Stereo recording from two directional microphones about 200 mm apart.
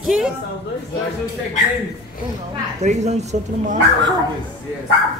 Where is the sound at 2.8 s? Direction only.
35° right (ahead or behind).